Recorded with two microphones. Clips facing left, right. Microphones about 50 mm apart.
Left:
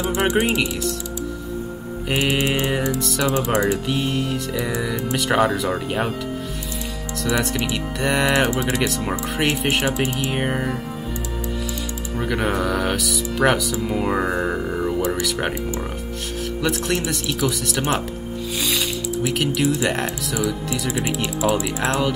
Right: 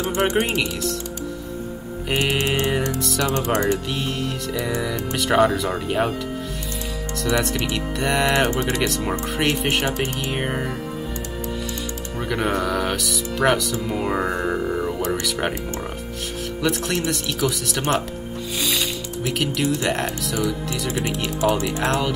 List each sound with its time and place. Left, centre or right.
0.0 s mantra: centre
0.4 s speech: centre
2.0 s mantra: centre
3.8 s speech: centre
7.2 s speech: centre
8.5 s mantra: centre
8.8 s speech: centre
9.9 s mantra: centre
10.3 s speech: centre
12.2 s speech: centre
16.6 s speech: centre
21.4 s speech: centre
21.8 s speech: centre